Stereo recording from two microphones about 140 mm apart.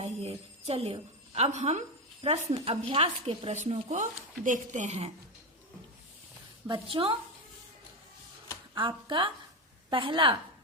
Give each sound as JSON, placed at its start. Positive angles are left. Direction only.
{"t": 0.0, "sound": "a woman's voice", "side_deg": -45}
{"t": 6.7, "sound": "a woman's voice", "side_deg": -40}
{"t": 8.7, "sound": "a woman's voice", "side_deg": -35}